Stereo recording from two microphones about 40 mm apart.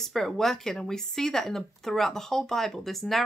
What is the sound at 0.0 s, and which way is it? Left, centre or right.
A woman's voice, centre.